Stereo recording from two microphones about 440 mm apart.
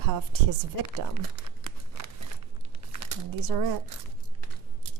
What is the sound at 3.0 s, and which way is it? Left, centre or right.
Speech, right.